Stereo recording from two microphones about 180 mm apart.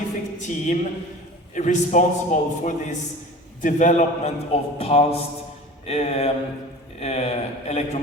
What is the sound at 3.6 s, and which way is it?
A man's voice, 45° left (ahead or behind).